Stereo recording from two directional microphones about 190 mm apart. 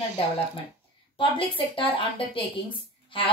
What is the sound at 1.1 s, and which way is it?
A woman's voice, 25° left (ahead or behind).